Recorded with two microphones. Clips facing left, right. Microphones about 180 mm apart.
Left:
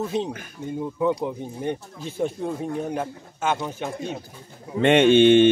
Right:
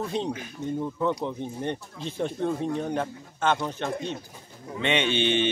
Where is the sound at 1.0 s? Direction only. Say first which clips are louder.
Left 5 dB; 10° left (ahead or behind).